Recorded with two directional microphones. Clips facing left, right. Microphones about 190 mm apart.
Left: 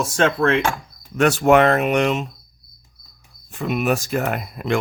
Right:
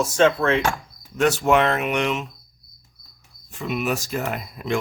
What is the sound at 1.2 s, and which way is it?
Speech, 55° left (ahead or behind).